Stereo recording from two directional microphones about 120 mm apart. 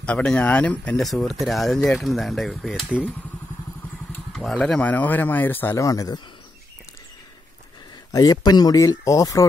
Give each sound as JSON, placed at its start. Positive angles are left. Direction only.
{"t": 0.0, "sound": "speech", "side_deg": 10}
{"t": 4.3, "sound": "speech", "side_deg": 0}
{"t": 5.9, "sound": "speech", "side_deg": 30}
{"t": 8.1, "sound": "speech", "side_deg": 30}